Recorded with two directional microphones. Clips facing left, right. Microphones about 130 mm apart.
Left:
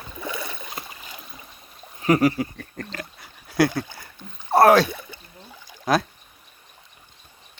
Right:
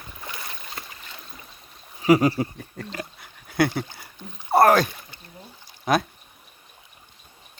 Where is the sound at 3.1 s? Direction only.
Centre (ahead or behind).